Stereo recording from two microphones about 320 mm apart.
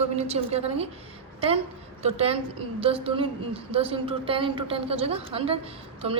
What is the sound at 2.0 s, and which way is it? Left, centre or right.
A woman's voice, centre.